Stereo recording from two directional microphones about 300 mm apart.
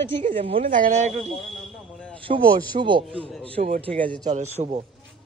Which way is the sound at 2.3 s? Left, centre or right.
Right.